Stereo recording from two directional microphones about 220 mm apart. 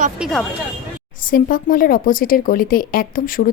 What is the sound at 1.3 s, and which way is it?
Speech, 40° left (ahead or behind).